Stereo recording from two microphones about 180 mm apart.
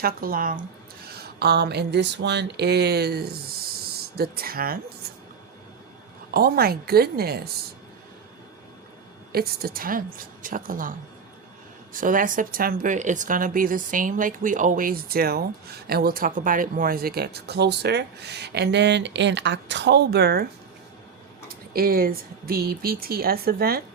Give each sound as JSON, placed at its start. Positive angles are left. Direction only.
{"t": 0.0, "sound": "speech", "side_deg": -55}
{"t": 6.3, "sound": "speech", "side_deg": -60}
{"t": 9.3, "sound": "speech", "side_deg": -60}
{"t": 11.9, "sound": "speech", "side_deg": -50}
{"t": 21.5, "sound": "speech", "side_deg": -55}